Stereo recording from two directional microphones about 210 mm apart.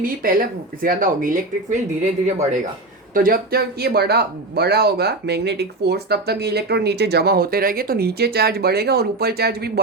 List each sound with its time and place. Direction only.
0.0 s speech: 40° right (ahead or behind)
3.2 s speech: 45° right (ahead or behind)